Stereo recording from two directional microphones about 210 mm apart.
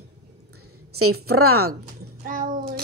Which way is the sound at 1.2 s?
90° right.